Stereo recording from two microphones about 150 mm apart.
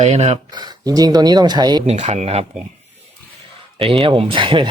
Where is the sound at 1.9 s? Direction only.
45° right (ahead or behind).